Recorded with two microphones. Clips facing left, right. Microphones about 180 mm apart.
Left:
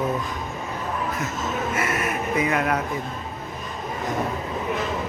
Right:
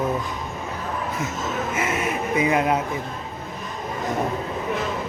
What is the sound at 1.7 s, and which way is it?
Speech, 90° right.